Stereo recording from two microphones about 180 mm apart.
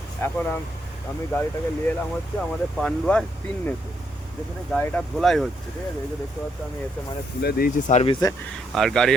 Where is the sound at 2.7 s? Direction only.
5° left (ahead or behind).